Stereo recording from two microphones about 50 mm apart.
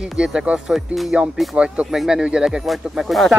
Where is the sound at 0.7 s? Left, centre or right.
Centre.